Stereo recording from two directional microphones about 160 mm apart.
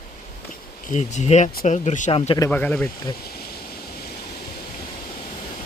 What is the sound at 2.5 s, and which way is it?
Speech, 10° left (ahead or behind).